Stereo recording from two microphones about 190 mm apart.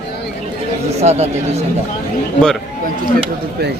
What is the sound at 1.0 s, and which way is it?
Speech, 35° right (ahead or behind).